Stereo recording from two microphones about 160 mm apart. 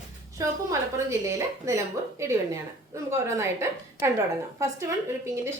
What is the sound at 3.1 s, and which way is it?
Speech, 15° right (ahead or behind).